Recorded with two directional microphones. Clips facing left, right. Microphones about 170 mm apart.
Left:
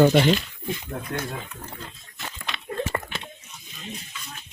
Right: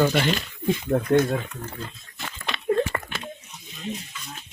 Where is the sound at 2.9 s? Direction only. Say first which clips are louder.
Left 1 dB; 15° left (ahead or behind).